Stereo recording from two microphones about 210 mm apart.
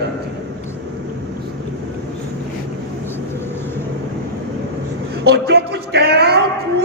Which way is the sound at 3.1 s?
10° left (ahead or behind).